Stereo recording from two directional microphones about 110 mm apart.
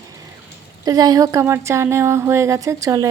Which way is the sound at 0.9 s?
35° right (ahead or behind).